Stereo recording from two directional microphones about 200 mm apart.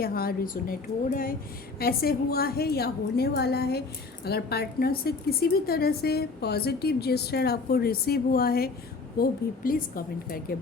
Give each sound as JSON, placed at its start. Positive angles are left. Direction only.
{"t": 0.0, "sound": "a woman's voice", "side_deg": 50}